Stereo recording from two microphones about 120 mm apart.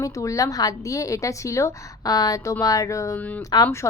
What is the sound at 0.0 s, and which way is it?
A woman's voice, 25° left (ahead or behind).